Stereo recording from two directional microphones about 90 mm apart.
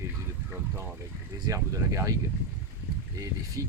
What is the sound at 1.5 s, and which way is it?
Speech, 35° right (ahead or behind).